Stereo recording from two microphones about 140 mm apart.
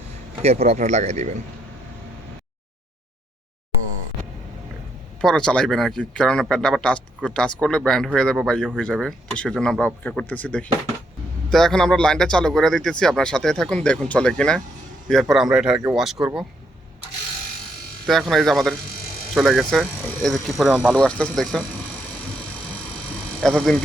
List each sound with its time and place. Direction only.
0.4 s speech: 50° right (ahead or behind)
5.2 s speech: 5° left (ahead or behind)
18.0 s speech: centre (ahead or behind)
23.4 s speech: centre (ahead or behind)